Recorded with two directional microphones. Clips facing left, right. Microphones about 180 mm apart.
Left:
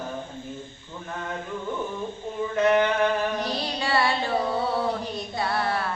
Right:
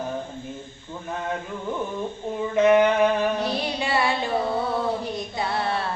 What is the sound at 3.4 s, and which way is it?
Carnatic music, 15° right (ahead or behind).